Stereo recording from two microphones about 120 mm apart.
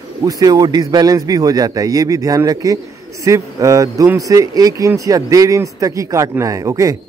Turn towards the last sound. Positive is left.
turn(degrees=-30)  # may be behind; listen again after turning